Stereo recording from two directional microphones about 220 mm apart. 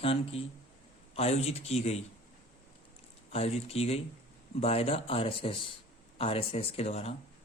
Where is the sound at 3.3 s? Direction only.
25° left (ahead or behind).